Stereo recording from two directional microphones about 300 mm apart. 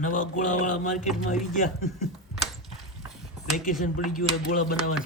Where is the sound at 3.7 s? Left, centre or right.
Left.